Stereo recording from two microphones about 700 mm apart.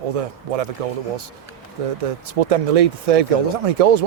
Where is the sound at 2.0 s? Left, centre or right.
Right.